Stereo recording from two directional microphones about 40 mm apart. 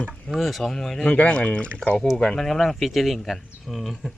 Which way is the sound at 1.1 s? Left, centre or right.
Left.